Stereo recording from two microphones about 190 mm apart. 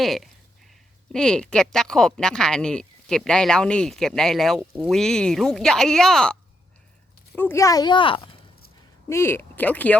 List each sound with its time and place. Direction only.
0.0 s speech: centre (ahead or behind)
7.3 s speech: 10° left (ahead or behind)
9.0 s speech: 15° left (ahead or behind)